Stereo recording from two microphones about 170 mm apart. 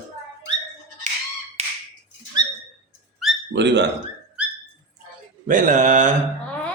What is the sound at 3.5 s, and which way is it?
Speech, 90° right.